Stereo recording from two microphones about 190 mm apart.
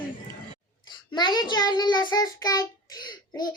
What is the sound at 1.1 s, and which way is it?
Child singing, 25° left (ahead or behind).